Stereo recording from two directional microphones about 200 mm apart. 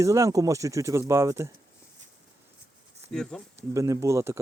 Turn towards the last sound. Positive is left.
turn(degrees=-15)  # may be behind; listen again after turning